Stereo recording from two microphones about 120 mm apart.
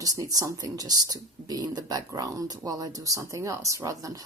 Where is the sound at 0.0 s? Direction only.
30° right (ahead or behind).